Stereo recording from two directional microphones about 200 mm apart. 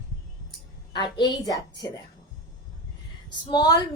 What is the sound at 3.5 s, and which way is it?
Speech, 20° left (ahead or behind).